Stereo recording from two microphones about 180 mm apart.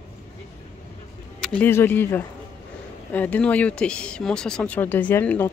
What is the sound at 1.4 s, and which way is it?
Speech, 5° left (ahead or behind).